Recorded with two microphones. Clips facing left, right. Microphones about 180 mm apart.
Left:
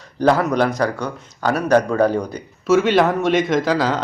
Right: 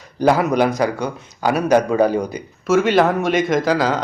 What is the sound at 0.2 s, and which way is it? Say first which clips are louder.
A man's voice: right 1 dB; 10° right (ahead or behind).